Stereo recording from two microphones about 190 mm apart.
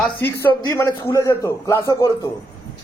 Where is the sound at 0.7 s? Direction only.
20° left (ahead or behind).